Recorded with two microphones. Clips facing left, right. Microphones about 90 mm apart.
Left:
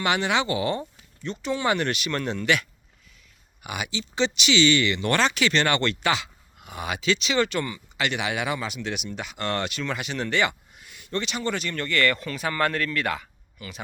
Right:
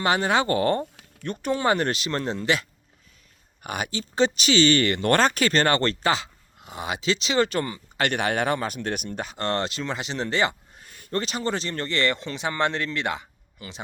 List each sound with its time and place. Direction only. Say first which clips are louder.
0.0 s speech: right 2 dB; 40° right (ahead or behind)
3.6 s speech: right 2 dB; 45° right (ahead or behind); by 13.8 s 25° right (ahead or behind)